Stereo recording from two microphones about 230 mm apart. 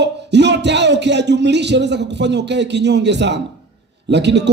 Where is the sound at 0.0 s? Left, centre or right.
Right.